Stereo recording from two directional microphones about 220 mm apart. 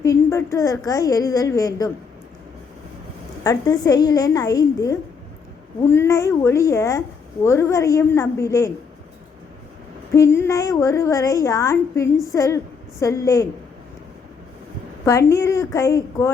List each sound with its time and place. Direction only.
0.0 s a sound: 15° left (ahead or behind)
0.9 s a woman's voice: 15° left (ahead or behind)
3.4 s a woman's voice: 15° left (ahead or behind)
10.2 s a woman's voice: 10° left (ahead or behind)
15.0 s a woman's voice: 15° left (ahead or behind)